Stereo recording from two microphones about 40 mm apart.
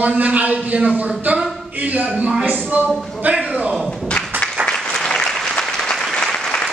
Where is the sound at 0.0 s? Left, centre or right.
Right.